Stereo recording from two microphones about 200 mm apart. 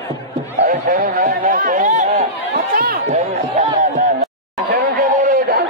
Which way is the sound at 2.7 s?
45° right (ahead or behind).